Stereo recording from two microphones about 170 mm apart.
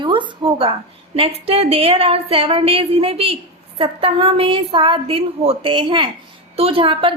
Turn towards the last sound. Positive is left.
turn(degrees=-30)  # may be behind; listen again after turning